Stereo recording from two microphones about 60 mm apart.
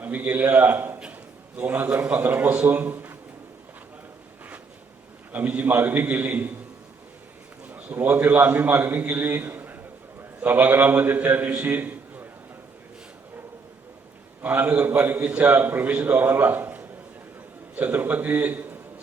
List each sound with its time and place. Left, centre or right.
0.0 s a man's voice: right
5.3 s a man's voice: right
7.9 s a man's voice: right
14.4 s a man's voice: right
15.3 s a man's voice: right
16.4 s a sound: right
17.7 s a man's voice: right